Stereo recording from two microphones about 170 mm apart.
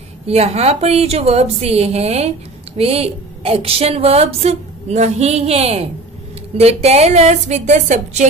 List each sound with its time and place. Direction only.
0.3 s a woman's voice: 35° right (ahead or behind)